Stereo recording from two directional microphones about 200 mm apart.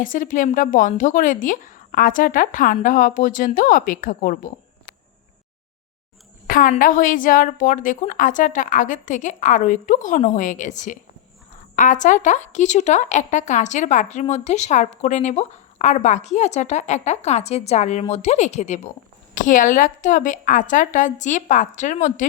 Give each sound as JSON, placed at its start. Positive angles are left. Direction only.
{"t": 0.0, "sound": "a woman's voice", "side_deg": 40}
{"t": 6.5, "sound": "a woman's voice", "side_deg": 45}